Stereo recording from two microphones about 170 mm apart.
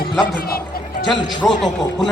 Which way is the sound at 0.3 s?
60° left (ahead or behind).